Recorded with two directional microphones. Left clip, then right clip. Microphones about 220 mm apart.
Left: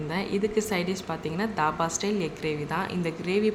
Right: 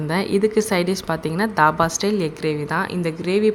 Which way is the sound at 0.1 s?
30° right (ahead or behind).